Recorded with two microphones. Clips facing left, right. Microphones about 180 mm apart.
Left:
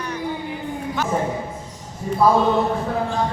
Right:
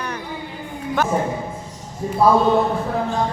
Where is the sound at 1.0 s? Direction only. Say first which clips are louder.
Right 5 dB; 55° right (ahead or behind).